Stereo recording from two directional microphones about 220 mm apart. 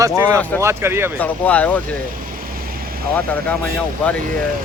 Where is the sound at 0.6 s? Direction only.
10° right (ahead or behind).